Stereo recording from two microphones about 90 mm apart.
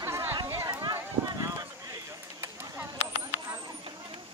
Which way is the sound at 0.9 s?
40° right (ahead or behind).